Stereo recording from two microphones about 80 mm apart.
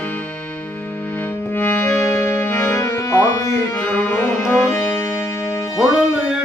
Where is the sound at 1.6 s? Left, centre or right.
Left.